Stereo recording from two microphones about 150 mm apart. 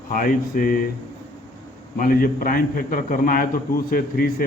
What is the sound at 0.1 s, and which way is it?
Speech, 65° left (ahead or behind).